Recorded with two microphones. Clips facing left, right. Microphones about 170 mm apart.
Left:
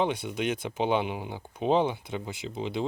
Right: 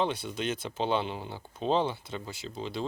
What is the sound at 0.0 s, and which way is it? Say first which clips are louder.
Speech: left 3 dB; 15° left (ahead or behind).